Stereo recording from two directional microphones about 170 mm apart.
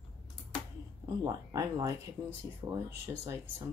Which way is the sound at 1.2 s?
20° right (ahead or behind).